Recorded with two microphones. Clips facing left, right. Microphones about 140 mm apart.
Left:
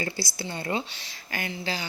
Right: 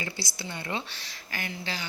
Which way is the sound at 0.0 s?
35° left (ahead or behind).